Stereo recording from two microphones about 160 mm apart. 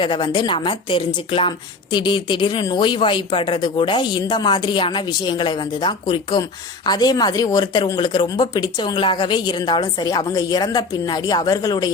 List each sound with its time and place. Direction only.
0.0 s a woman's voice: 30° left (ahead or behind)